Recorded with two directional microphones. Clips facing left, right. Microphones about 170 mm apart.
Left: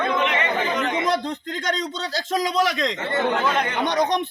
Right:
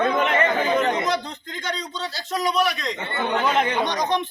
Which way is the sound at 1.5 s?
85° left.